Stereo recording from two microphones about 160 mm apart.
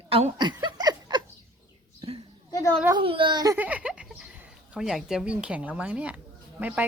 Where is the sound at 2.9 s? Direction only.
35° right (ahead or behind).